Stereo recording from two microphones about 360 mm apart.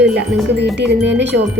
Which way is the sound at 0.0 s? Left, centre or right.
Right.